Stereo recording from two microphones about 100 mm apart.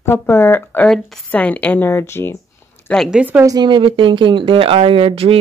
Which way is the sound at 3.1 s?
15° right (ahead or behind).